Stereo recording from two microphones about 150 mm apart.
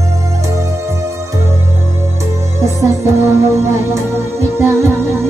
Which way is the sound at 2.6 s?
20° right (ahead or behind).